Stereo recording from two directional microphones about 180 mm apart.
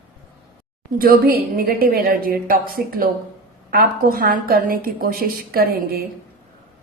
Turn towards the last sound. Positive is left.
turn(degrees=-55)  # may be behind; listen again after turning